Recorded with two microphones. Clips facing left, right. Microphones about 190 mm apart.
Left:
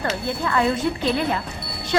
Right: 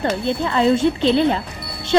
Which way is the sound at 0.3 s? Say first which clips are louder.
Right 5 dB; 25° right (ahead or behind).